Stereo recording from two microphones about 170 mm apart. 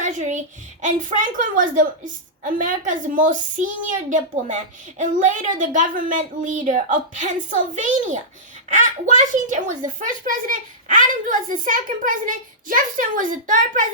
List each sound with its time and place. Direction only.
0.0 s a woman's voice: 45° right (ahead or behind)